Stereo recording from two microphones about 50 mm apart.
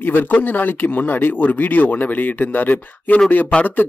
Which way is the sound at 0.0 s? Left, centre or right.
Left.